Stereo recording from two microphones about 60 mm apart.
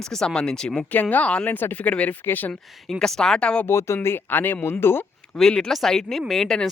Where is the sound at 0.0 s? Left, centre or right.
Centre.